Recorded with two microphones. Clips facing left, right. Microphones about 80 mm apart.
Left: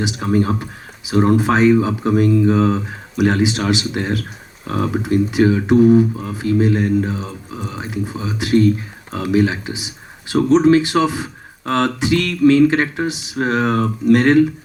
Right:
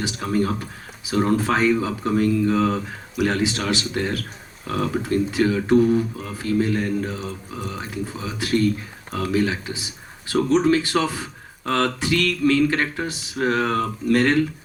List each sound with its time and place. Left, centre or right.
0.0 s speech: left